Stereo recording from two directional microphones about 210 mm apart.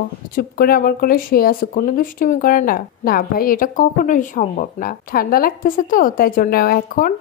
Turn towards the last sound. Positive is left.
turn(degrees=45)  # may be behind; listen again after turning